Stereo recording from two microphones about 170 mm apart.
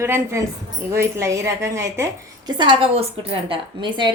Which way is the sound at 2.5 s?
30° right (ahead or behind).